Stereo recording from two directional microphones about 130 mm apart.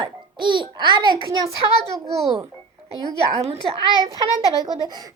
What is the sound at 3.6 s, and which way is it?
A child's voice, 35° right (ahead or behind).